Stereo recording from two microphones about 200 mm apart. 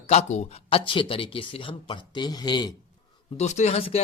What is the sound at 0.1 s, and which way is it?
Speech, 35° left (ahead or behind).